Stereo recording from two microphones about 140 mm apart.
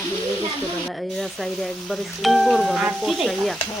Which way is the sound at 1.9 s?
Centre (ahead or behind).